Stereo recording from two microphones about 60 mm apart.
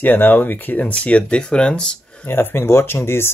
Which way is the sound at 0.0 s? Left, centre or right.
Left.